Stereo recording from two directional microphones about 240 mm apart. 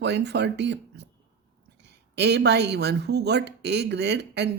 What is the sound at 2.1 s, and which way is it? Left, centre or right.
Speech, right.